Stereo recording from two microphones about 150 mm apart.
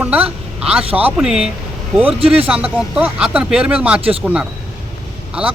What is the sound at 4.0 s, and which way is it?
Speech, 40° right (ahead or behind).